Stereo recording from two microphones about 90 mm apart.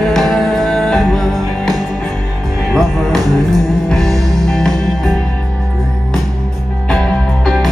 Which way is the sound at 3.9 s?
5° left (ahead or behind).